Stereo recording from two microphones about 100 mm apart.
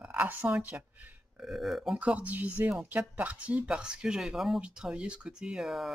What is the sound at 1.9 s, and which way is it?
Speech, 15° right (ahead or behind).